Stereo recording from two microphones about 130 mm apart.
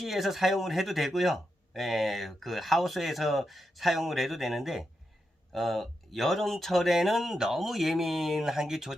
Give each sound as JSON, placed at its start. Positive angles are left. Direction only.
{"t": 0.0, "sound": "speech", "side_deg": 0}